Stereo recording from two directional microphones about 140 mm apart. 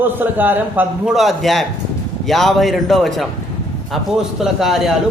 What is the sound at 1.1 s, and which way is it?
A man's voice, centre (ahead or behind).